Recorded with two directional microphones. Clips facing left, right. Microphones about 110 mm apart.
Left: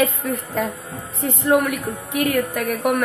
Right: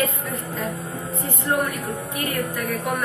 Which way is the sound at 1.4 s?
75° left (ahead or behind).